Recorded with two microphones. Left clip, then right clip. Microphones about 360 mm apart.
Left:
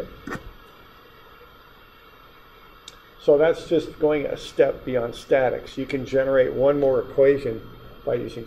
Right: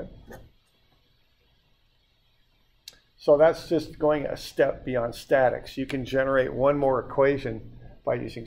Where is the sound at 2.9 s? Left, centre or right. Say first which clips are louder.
Left 2 dB; right.